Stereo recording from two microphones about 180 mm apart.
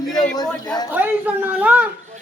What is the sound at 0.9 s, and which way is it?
Speech, 10° right (ahead or behind).